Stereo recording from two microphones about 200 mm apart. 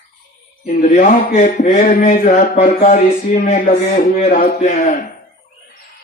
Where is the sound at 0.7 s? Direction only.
35° left (ahead or behind).